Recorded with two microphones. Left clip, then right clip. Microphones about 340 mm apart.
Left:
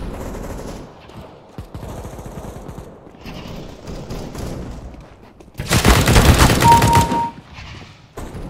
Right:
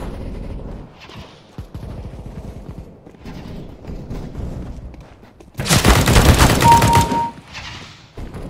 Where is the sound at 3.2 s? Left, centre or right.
Centre.